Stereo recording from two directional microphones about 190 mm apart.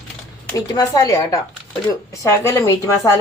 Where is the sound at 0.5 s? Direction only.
20° left (ahead or behind).